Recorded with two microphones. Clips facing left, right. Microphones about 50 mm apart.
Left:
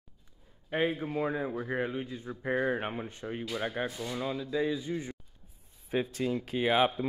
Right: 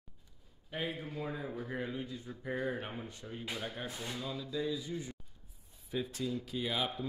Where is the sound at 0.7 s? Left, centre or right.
Left.